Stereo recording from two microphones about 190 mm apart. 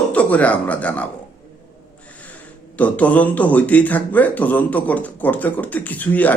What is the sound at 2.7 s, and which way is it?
Speech, 10° left (ahead or behind).